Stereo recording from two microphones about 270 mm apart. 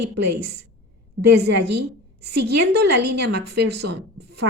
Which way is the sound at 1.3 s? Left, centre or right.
Right.